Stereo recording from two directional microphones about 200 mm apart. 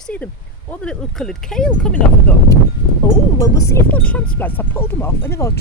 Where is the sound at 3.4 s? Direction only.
15° left (ahead or behind).